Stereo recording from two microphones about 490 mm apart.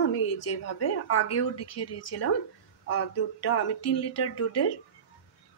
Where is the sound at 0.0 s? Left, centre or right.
Left.